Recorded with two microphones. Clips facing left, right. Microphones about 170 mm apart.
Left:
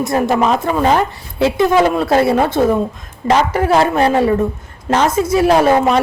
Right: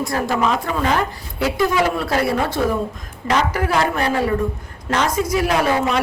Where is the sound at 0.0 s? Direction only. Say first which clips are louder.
Left 5 dB; 20° left (ahead or behind).